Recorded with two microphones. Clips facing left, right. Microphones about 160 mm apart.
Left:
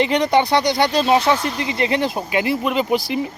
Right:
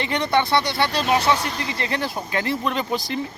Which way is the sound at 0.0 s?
15° left (ahead or behind).